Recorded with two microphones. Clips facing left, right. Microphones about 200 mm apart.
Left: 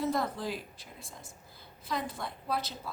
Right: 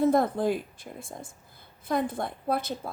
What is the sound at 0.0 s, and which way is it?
A woman's voice, 55° right (ahead or behind).